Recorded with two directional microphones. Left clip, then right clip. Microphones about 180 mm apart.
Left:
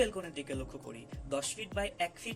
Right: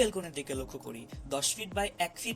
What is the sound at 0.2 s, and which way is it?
Speech, 35° right (ahead or behind).